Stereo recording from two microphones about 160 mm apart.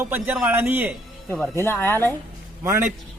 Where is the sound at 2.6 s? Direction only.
15° right (ahead or behind).